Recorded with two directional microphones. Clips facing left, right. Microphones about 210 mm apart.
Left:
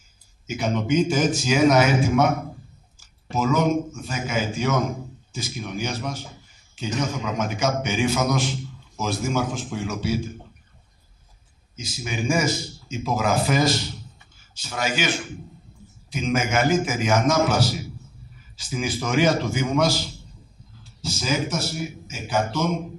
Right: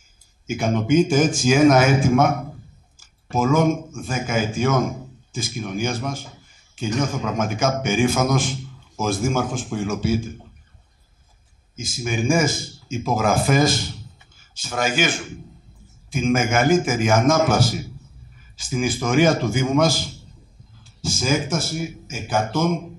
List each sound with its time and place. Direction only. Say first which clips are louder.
0.5 s a man's voice: right 3 dB; 50° right (ahead or behind)
11.7 s a man's voice: right 5 dB; 50° right (ahead or behind)